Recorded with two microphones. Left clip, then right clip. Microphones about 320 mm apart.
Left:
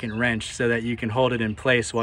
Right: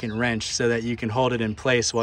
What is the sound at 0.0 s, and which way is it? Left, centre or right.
Speech, centre.